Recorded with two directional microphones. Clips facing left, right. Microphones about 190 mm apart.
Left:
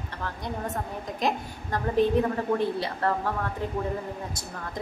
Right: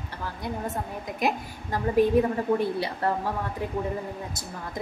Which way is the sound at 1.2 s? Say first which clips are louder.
Right 1 dB; 10° right (ahead or behind).